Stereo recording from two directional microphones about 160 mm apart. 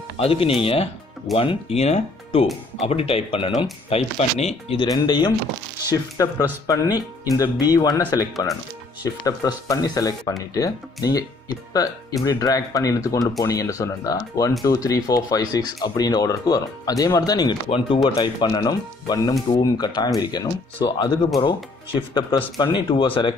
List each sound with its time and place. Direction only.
0.2 s speech: 35° left (ahead or behind)
4.8 s speech: 25° left (ahead or behind)